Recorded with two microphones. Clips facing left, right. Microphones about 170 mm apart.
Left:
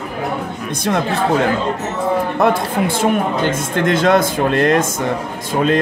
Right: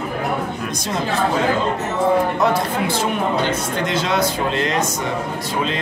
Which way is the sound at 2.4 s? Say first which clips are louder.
Left 3 dB; 55° left (ahead or behind).